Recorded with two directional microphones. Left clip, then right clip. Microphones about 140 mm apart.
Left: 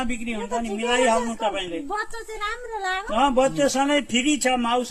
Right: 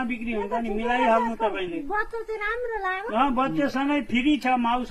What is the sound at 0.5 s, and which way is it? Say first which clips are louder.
Speech: left 3 dB; 30° left (ahead or behind).